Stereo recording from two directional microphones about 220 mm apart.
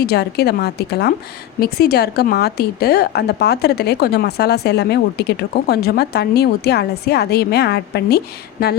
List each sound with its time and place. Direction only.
0.0 s a woman's voice: 45° left (ahead or behind)